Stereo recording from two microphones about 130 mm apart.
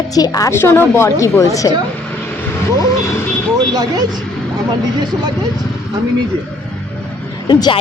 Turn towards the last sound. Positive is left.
turn(degrees=35)  # may be behind; listen again after turning